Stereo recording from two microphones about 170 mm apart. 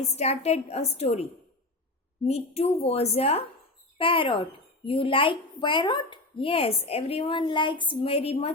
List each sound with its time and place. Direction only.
0.2 s speech: 40° left (ahead or behind)